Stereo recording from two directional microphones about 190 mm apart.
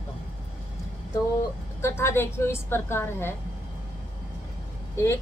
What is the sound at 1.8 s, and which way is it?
A woman's voice, 15° left (ahead or behind).